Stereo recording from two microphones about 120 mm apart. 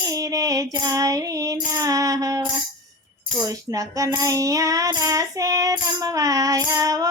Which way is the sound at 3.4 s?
30° right (ahead or behind).